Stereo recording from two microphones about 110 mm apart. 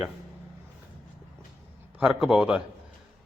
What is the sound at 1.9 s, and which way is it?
Speech, 5° right (ahead or behind).